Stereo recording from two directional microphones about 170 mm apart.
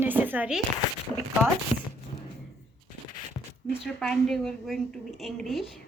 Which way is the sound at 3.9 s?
5° left (ahead or behind).